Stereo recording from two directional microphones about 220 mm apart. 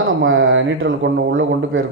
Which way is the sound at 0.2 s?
60° right (ahead or behind).